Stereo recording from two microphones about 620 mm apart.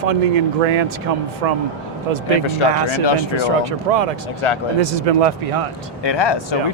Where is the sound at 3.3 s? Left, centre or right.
Right.